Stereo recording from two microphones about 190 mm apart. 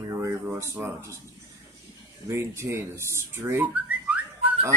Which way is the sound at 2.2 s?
15° right (ahead or behind).